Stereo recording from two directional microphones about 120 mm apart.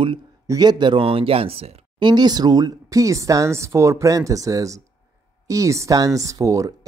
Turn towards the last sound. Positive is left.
turn(degrees=-30)  # may be behind; listen again after turning